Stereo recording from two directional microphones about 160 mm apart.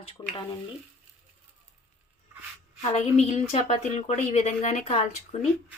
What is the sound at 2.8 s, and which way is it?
Speech, 45° left (ahead or behind).